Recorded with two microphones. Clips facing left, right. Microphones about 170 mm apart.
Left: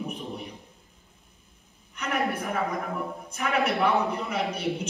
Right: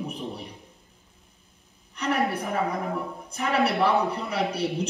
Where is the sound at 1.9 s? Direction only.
35° right (ahead or behind).